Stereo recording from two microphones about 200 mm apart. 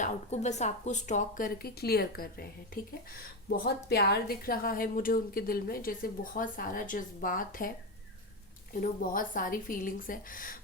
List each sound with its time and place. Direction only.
0.0 s a woman's voice: 35° left (ahead or behind)
8.7 s a woman's voice: 45° left (ahead or behind)